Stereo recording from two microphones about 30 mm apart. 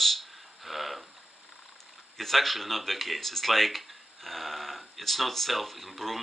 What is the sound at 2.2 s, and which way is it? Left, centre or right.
Speech, centre.